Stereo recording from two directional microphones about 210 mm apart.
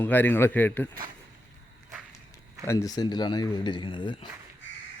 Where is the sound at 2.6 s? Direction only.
15° left (ahead or behind).